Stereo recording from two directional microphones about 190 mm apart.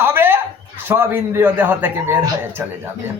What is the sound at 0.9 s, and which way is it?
A man's voice, 10° right (ahead or behind).